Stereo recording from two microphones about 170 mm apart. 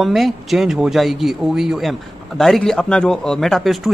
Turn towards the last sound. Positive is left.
turn(degrees=0)  # may be behind; listen again after turning